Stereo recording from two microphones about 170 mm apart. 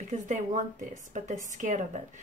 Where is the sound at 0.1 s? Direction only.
45° right (ahead or behind).